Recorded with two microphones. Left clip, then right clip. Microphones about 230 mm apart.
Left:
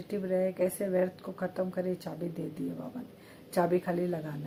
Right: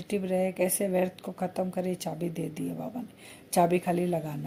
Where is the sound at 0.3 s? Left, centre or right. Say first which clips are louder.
Even; right.